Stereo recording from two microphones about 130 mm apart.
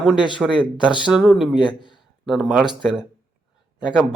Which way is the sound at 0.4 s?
5° right (ahead or behind).